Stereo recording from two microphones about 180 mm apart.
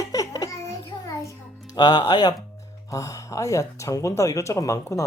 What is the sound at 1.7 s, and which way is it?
Speech, 25° left (ahead or behind).